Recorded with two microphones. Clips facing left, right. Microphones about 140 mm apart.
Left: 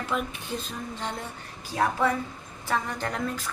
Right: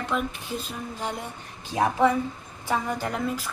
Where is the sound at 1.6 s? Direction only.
20° right (ahead or behind).